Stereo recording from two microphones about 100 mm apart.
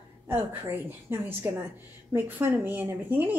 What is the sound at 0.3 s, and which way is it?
A woman's voice, 20° right (ahead or behind).